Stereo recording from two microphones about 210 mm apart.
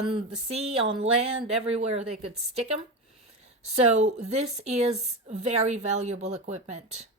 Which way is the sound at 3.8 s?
30° right (ahead or behind).